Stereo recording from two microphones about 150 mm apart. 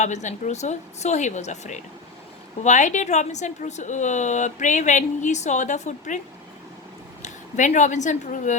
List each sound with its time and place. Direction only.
0.0 s a woman's voice: 50° left (ahead or behind)
7.2 s speech: 55° left (ahead or behind)